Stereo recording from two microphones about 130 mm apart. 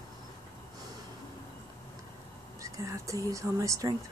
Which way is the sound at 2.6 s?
25° right (ahead or behind).